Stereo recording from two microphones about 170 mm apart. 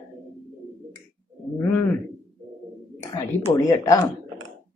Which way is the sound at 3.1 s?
20° left (ahead or behind).